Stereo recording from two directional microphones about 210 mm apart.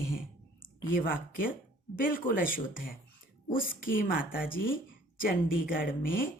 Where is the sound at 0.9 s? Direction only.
40° left (ahead or behind).